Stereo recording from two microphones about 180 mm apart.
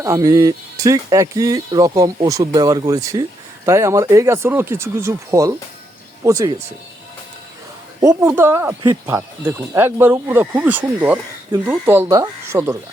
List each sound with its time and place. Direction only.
0.0 s speech: 20° right (ahead or behind)
8.0 s speech: 15° right (ahead or behind)